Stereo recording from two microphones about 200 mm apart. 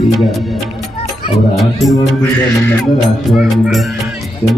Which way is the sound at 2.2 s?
10° left (ahead or behind).